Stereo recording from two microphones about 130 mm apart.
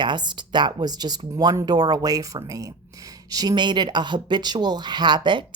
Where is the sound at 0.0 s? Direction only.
35° right (ahead or behind).